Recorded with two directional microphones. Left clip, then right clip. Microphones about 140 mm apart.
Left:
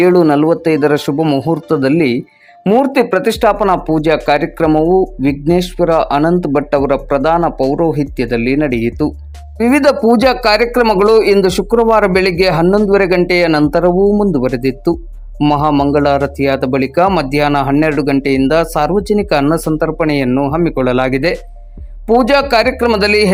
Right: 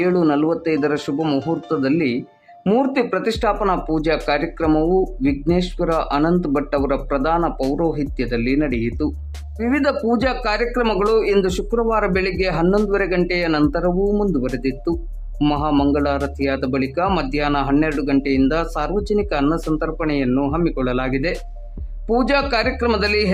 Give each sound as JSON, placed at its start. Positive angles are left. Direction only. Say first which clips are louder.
{"t": 0.0, "sound": "speech", "louder": "left 8 dB", "side_deg": 40}
{"t": 1.2, "sound": "speech", "louder": "left 7 dB", "side_deg": 25}
{"t": 1.6, "sound": "speech", "louder": "left 8 dB", "side_deg": 40}